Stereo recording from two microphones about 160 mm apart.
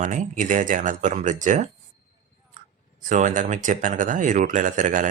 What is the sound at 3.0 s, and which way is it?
Speech, 50° right (ahead or behind).